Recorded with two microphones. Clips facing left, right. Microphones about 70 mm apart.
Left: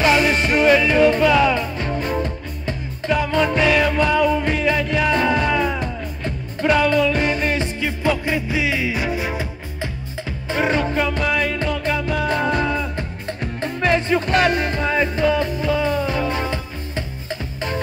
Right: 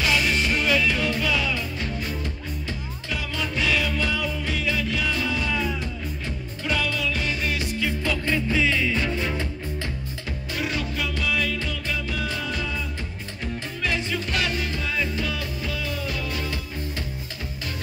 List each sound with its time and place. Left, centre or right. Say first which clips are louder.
0.0 s music: left 7 dB; left
7.5 s music: left 4 dB; left
10.5 s music: left 10 dB; left
13.8 s music: left 9 dB; left